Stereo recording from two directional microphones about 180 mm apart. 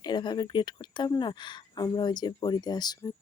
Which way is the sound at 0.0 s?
25° left (ahead or behind).